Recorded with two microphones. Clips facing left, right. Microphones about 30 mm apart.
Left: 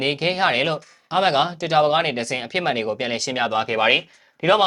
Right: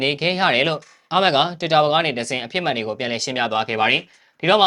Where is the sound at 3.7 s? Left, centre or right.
Centre.